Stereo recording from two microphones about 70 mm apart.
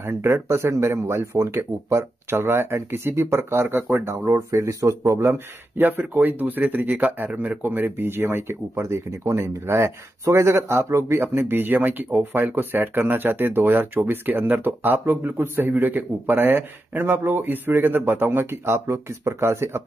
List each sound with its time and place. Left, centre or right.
0.0 s speech: right
5.3 s speech: right